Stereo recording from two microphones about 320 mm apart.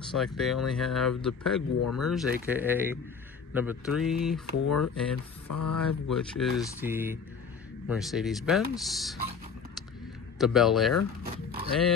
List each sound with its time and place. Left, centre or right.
0.1 s speech: centre
1.8 s speech: left
2.0 s speech: centre
4.6 s speech: left
6.0 s speech: centre
10.4 s speech: centre